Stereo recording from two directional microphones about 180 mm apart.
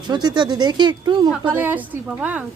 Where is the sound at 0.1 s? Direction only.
25° right (ahead or behind).